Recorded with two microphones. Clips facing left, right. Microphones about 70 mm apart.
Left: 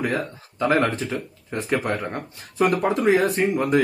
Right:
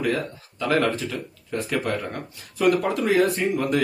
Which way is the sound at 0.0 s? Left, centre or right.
Left.